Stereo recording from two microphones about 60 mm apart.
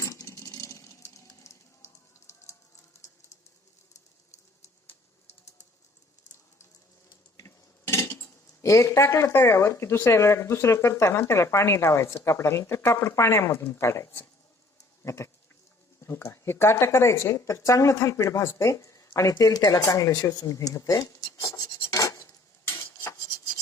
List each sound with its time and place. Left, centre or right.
0.0 s a sound: left
0.3 s a sound: left
7.4 s dishes: left
9.3 s speech: left
15.0 s goat: left
16.0 s speech: left
19.4 s speech: left